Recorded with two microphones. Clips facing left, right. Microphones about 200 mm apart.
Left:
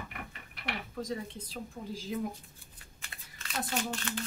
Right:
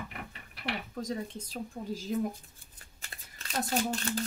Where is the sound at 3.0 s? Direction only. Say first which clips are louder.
Right 1 dB; 35° right (ahead or behind).